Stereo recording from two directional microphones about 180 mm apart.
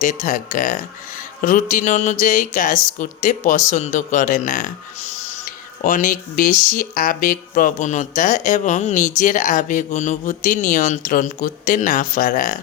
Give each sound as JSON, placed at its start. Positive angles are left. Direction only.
{"t": 0.0, "sound": "speech", "side_deg": 45}